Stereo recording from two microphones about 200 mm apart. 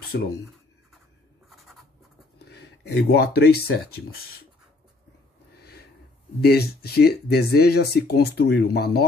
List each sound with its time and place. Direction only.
0.1 s speech: 55° left (ahead or behind)
2.3 s speech: 55° left (ahead or behind)
5.6 s snort: 50° left (ahead or behind)
6.4 s speech: 50° left (ahead or behind)